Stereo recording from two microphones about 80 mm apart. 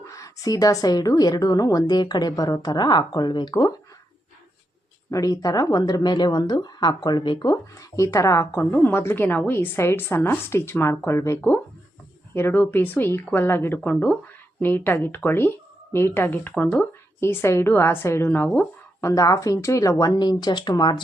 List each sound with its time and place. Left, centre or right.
0.0 s a woman's voice: left
5.1 s speech: left
8.7 s a woman's voice: left
17.2 s a woman's voice: left
19.0 s a woman's voice: left
20.1 s speech: left